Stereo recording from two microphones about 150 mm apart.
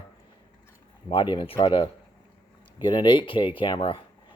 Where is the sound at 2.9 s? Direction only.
30° left (ahead or behind).